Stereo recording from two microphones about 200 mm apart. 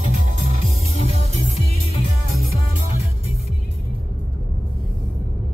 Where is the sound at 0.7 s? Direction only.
30° right (ahead or behind).